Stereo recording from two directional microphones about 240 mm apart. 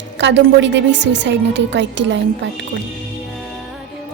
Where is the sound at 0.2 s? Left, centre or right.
Right.